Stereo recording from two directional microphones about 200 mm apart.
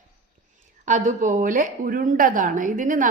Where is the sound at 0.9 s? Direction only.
40° right (ahead or behind).